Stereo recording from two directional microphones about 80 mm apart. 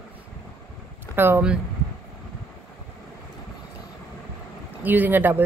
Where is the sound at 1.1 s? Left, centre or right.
Right.